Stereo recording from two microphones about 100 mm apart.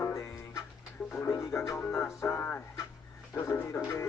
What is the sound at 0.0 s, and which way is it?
Music, 25° left (ahead or behind).